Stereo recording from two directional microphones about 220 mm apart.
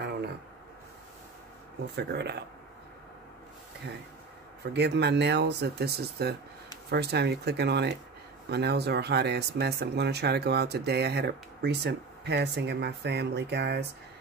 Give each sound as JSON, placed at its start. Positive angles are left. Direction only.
{"t": 2.0, "sound": "speech", "side_deg": -50}
{"t": 4.7, "sound": "speech", "side_deg": -50}